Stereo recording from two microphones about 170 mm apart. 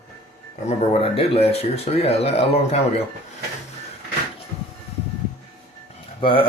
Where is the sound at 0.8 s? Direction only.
35° left (ahead or behind).